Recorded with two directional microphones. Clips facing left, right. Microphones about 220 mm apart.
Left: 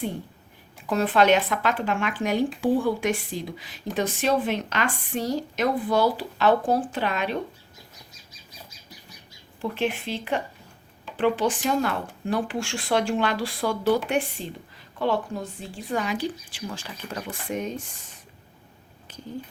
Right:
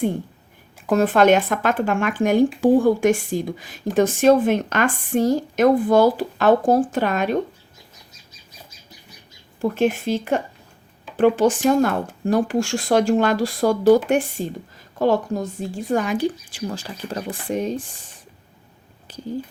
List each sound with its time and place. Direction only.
0.9 s speech: 45° right (ahead or behind)
9.6 s speech: 45° right (ahead or behind)
19.1 s speech: 35° right (ahead or behind)